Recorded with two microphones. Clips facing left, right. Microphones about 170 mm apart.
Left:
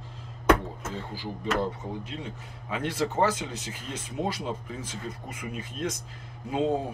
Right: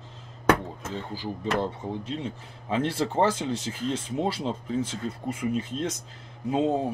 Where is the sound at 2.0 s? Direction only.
25° right (ahead or behind).